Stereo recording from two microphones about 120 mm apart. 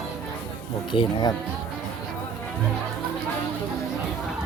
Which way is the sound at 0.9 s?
35° left (ahead or behind).